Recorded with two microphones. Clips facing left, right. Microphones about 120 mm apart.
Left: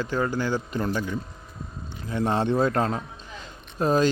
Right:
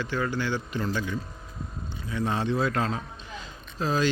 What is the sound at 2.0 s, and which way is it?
Speech, 50° left (ahead or behind).